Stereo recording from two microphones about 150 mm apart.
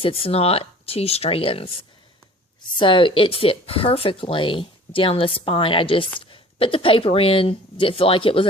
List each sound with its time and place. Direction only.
0.0 s speech: 40° left (ahead or behind)
2.7 s speech: 35° left (ahead or behind)